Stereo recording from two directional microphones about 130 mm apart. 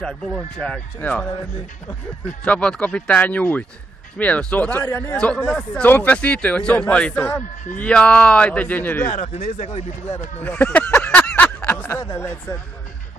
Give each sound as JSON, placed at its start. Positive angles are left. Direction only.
{"t": 0.6, "sound": "speech", "side_deg": 10}
{"t": 2.4, "sound": "speech", "side_deg": 10}
{"t": 5.1, "sound": "speech", "side_deg": 5}
{"t": 9.0, "sound": "speech", "side_deg": 90}
{"t": 9.3, "sound": "speech", "side_deg": 55}
{"t": 10.4, "sound": "a sound", "side_deg": 10}
{"t": 12.2, "sound": "speech", "side_deg": 20}